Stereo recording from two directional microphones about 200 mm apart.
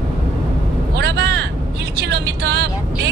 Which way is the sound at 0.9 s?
55° right (ahead or behind).